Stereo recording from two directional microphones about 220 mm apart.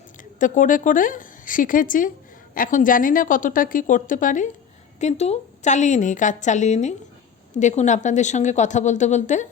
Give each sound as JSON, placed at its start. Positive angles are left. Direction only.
{"t": 0.3, "sound": "a woman's voice", "side_deg": 35}